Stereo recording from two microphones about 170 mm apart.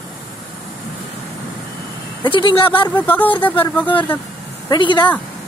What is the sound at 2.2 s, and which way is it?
Speech, 25° left (ahead or behind).